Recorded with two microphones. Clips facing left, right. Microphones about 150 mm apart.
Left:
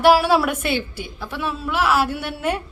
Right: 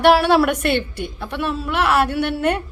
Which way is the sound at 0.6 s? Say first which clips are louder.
Right 4 dB; 60° right (ahead or behind).